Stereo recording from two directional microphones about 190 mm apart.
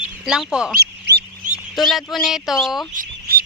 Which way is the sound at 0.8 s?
60° right (ahead or behind).